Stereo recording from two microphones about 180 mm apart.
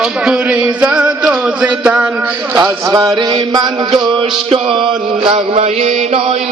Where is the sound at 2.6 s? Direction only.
20° right (ahead or behind).